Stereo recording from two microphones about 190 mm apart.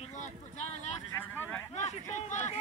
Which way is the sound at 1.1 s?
10° left (ahead or behind).